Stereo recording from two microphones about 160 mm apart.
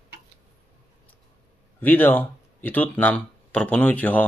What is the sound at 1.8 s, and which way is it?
Speech, 10° left (ahead or behind).